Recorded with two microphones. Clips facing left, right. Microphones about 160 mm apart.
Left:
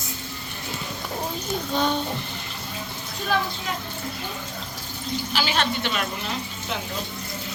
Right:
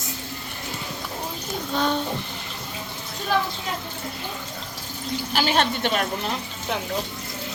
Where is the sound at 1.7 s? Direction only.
Centre (ahead or behind).